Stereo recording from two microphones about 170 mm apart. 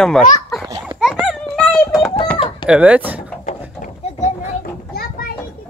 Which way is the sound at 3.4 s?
50° left (ahead or behind).